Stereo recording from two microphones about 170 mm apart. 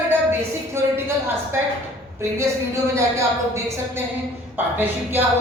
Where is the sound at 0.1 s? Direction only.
15° right (ahead or behind).